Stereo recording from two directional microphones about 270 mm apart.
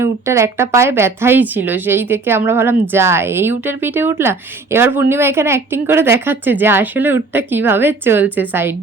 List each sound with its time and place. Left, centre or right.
0.0 s a woman's voice: centre